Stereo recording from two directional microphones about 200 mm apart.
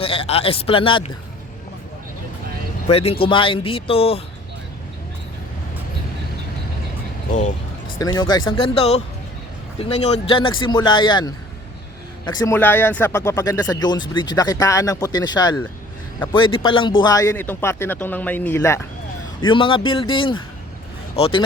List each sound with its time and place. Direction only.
0.0 s speech: 30° left (ahead or behind)
2.9 s speech: 30° left (ahead or behind)
7.9 s a man's voice: 20° left (ahead or behind)
16.6 s a man's voice: 25° left (ahead or behind)
19.5 s speech: 25° left (ahead or behind)